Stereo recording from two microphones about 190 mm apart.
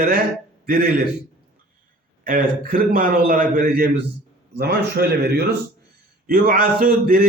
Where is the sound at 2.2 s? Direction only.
45° right (ahead or behind).